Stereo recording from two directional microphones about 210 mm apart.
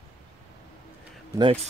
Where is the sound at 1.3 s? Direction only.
25° right (ahead or behind).